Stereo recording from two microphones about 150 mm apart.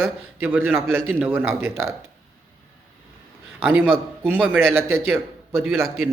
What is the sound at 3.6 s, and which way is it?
Speech, 15° right (ahead or behind).